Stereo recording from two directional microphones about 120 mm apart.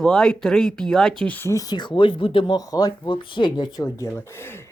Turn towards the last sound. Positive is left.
turn(degrees=40)  # may be behind; listen again after turning